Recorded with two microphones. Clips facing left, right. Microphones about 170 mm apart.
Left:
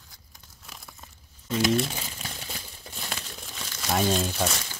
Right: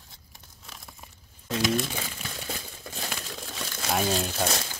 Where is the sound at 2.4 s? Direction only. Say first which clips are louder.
Right 4 dB; 45° right (ahead or behind).